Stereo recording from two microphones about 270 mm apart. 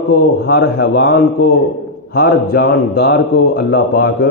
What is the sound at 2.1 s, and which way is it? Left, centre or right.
Speech, left.